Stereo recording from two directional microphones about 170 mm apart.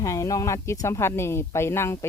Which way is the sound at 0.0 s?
20° left (ahead or behind).